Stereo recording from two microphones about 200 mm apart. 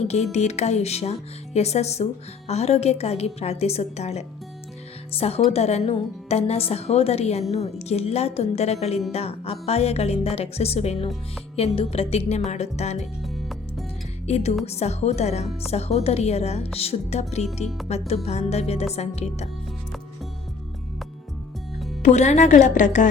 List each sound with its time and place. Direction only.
0.0 s a woman's voice: 35° left (ahead or behind)
13.2 s music: centre (ahead or behind)
14.3 s speech: 35° left (ahead or behind)
17.4 s speech: centre (ahead or behind)
18.1 s speech: 30° left (ahead or behind)
22.0 s speech: 35° left (ahead or behind)